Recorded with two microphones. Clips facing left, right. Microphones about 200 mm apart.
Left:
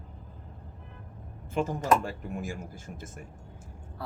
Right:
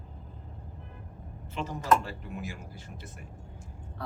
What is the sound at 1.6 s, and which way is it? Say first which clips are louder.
Speech: left 2 dB; 50° left (ahead or behind).